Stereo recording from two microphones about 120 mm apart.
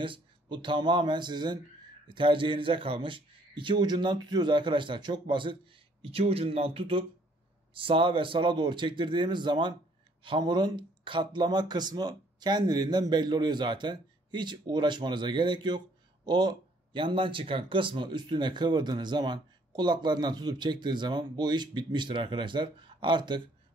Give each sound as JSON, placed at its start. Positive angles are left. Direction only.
{"t": 0.0, "sound": "a man's voice", "side_deg": -45}